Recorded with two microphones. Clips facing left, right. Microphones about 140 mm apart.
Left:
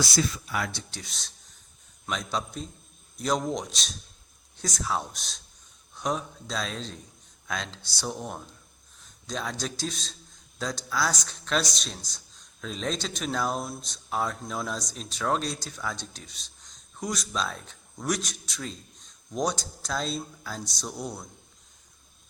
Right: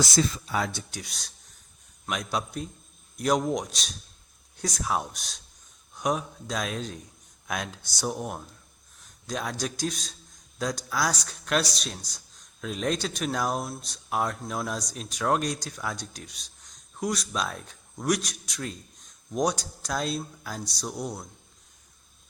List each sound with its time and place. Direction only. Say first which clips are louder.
0.2 s speech: right 3 dB; 30° right (ahead or behind)
0.9 s speech: right 2 dB; 10° right (ahead or behind)